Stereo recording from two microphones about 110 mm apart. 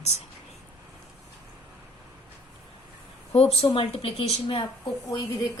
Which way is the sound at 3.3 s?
65° left (ahead or behind).